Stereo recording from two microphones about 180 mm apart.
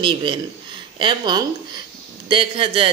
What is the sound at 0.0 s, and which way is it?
Speech, 25° right (ahead or behind).